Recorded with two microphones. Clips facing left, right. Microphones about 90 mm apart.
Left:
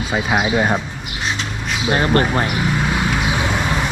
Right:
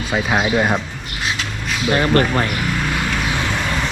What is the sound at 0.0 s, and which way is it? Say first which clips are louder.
Speech: even; 5° left (ahead or behind).